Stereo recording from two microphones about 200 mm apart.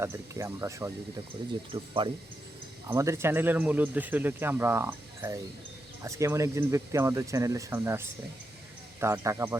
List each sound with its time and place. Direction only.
0.0 s speech: 10° right (ahead or behind)
1.7 s speech: 25° right (ahead or behind)
2.9 s speech: 15° right (ahead or behind)